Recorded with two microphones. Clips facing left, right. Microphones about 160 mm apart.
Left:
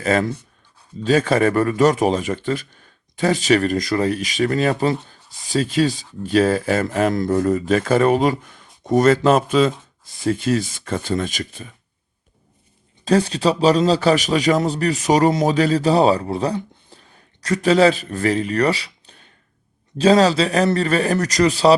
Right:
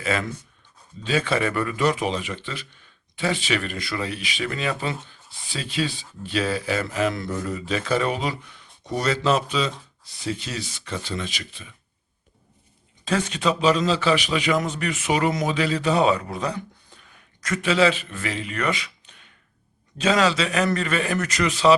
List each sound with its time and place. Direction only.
0.0 s a man's voice: 40° left (ahead or behind)
13.1 s a man's voice: 35° left (ahead or behind)